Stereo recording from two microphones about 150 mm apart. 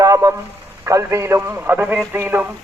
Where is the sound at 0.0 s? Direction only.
25° right (ahead or behind).